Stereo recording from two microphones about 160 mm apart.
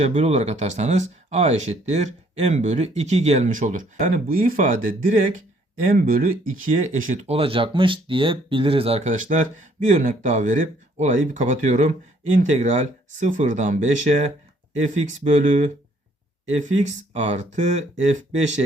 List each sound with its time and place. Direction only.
0.0 s speech: 40° right (ahead or behind)